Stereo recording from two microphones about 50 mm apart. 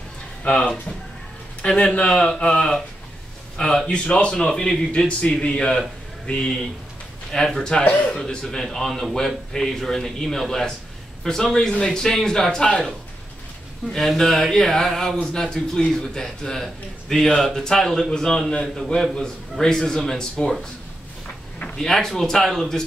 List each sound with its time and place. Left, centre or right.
0.4 s a man's voice: left
13.9 s a man's voice: centre
21.7 s a man's voice: centre